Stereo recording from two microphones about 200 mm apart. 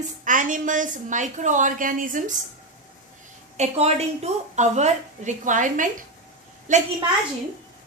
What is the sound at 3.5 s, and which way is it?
A woman's voice, 30° right (ahead or behind).